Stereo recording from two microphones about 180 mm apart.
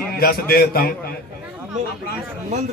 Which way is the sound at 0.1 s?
60° left (ahead or behind).